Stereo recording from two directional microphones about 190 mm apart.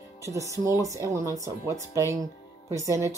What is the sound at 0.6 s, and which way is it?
A woman's voice, 15° right (ahead or behind).